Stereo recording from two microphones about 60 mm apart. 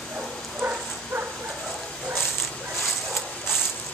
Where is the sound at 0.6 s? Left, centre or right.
Right.